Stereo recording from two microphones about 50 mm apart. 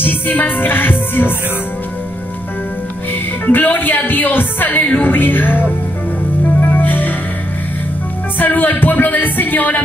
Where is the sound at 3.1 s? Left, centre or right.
Left.